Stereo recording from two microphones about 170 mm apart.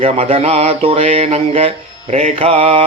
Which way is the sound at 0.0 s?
35° right (ahead or behind).